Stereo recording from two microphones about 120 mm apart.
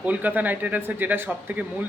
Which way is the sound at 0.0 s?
15° right (ahead or behind).